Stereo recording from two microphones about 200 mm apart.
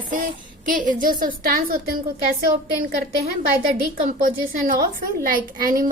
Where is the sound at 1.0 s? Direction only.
45° right (ahead or behind).